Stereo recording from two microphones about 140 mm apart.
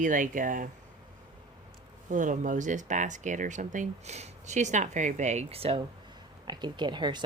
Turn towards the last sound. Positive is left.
turn(degrees=-35)  # may be behind; listen again after turning